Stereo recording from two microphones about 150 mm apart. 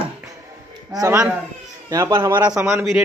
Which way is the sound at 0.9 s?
20° right (ahead or behind).